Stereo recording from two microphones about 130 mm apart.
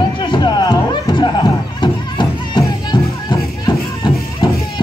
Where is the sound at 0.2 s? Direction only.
35° left (ahead or behind).